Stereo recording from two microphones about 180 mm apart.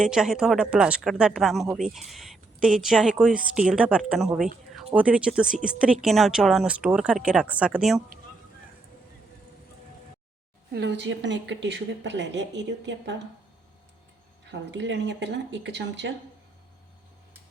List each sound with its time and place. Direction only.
0.0 s speech: 5° right (ahead or behind)
10.7 s speech: 75° right (ahead or behind)
14.5 s speech: 85° right